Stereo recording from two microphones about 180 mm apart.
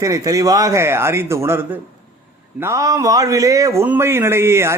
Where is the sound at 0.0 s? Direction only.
20° right (ahead or behind).